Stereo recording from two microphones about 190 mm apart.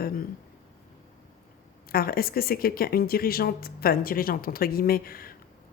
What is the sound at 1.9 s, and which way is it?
Speech, 50° left (ahead or behind).